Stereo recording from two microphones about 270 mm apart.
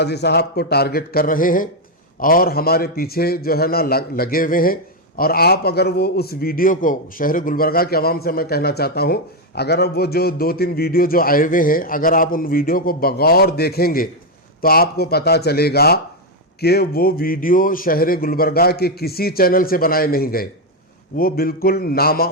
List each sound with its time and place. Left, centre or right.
0.0 s a man's voice: left